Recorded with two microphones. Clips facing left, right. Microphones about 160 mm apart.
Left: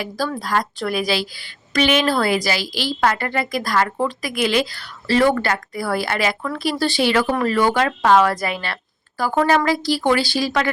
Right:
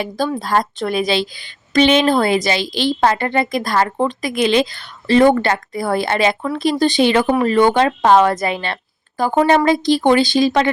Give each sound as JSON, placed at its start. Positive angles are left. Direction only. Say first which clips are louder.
{"t": 0.3, "sound": "a woman's voice", "louder": "right 4 dB", "side_deg": -25}